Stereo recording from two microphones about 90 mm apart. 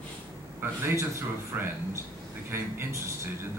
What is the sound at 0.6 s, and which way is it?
A man's voice, 30° right (ahead or behind).